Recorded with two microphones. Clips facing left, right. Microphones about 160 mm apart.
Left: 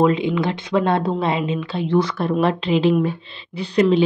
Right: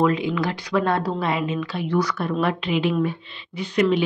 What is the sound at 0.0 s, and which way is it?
A woman's voice, 25° left (ahead or behind).